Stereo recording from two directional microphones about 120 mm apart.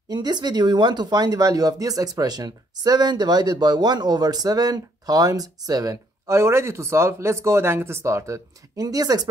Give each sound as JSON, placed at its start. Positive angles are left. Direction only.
{"t": 0.1, "sound": "speech", "side_deg": -35}